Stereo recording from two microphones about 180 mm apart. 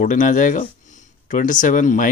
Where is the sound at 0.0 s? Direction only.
45° left (ahead or behind).